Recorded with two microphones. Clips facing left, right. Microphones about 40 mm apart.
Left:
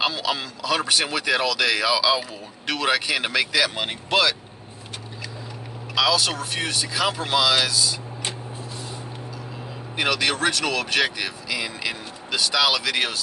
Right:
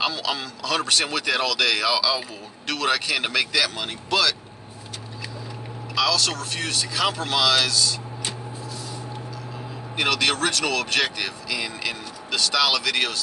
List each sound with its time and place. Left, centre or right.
0.0 s speech: centre
3.7 s speech: left
5.9 s speech: centre
9.9 s speech: centre